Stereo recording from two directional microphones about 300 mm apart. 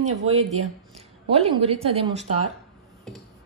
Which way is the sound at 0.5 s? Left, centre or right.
Right.